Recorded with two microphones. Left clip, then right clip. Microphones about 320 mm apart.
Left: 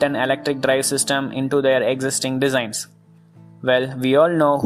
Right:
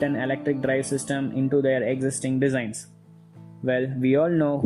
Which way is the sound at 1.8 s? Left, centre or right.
Left.